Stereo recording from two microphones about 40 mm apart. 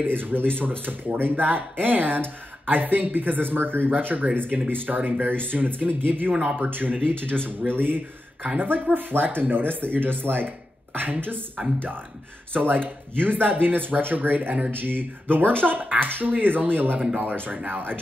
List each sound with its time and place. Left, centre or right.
0.0 s speech: right